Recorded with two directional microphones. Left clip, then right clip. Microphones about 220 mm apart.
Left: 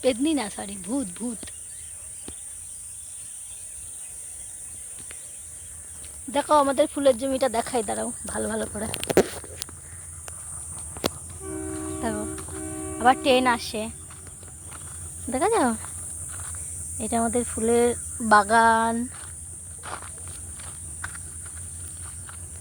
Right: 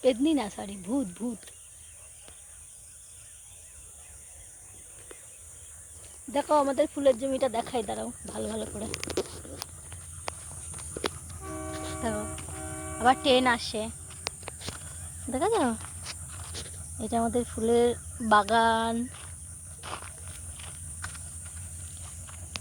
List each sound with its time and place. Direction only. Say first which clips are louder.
0.0 s cricket: left 1 dB; 10° left (ahead or behind)
6.3 s speech: left 5 dB; 20° left (ahead or behind); by 8.9 s 40° left (ahead or behind)
11.4 s train: left 4 dB; 30° right (ahead or behind)
12.1 s music: left 2 dB; 25° left (ahead or behind)
12.6 s a sound: left 4 dB; 45° right (ahead or behind)
13.2 s speech: left 3 dB; 25° left (ahead or behind)
15.3 s speech: left 4 dB; 25° left (ahead or behind)
17.0 s speech: left 3 dB; 20° left (ahead or behind)
19.8 s walk: left 3 dB; 10° left (ahead or behind)